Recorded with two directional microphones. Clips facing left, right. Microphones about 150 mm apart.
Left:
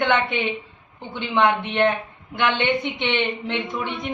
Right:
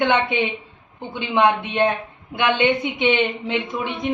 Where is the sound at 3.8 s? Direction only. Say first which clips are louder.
Right 2 dB; 20° right (ahead or behind).